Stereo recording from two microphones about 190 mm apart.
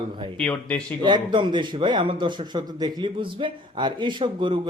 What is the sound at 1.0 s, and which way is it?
A man's voice, 25° right (ahead or behind).